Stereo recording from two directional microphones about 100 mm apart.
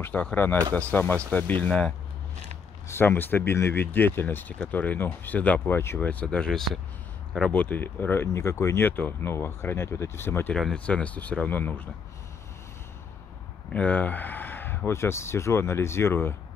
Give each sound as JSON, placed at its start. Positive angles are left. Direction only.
{"t": 0.0, "sound": "speech", "side_deg": 15}
{"t": 2.9, "sound": "speech", "side_deg": 20}
{"t": 10.5, "sound": "speech", "side_deg": 5}
{"t": 13.7, "sound": "speech", "side_deg": 15}